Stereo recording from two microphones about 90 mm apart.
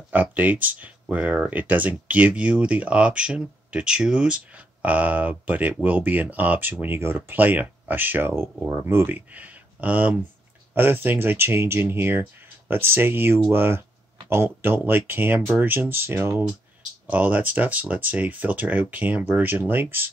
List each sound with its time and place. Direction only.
0.1 s speech: 20° right (ahead or behind)